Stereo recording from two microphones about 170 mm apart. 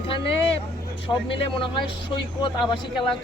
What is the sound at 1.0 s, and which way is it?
Speech, 30° left (ahead or behind).